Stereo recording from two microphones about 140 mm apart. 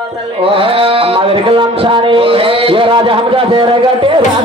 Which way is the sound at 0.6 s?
40° right (ahead or behind).